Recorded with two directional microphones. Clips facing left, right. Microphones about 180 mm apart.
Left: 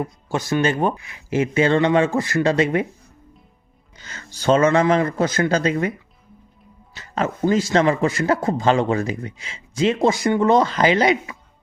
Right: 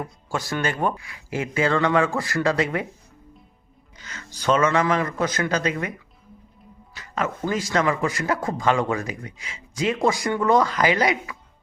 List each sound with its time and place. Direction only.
0.0 s speech: 20° left (ahead or behind)
3.9 s speech: 30° left (ahead or behind)
6.9 s speech: 25° left (ahead or behind)